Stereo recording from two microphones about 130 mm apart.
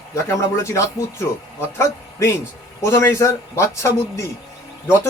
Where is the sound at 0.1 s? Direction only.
20° left (ahead or behind).